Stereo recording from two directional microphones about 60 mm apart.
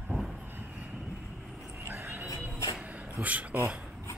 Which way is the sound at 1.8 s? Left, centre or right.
Right.